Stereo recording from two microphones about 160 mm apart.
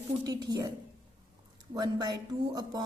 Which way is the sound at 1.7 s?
25° right (ahead or behind).